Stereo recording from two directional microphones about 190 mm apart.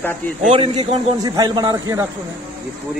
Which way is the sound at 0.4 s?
35° right (ahead or behind).